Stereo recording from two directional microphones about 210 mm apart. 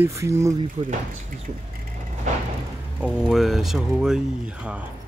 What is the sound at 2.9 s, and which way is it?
Speech, 5° right (ahead or behind).